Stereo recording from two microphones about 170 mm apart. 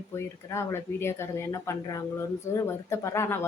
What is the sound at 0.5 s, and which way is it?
Speech, 15° left (ahead or behind).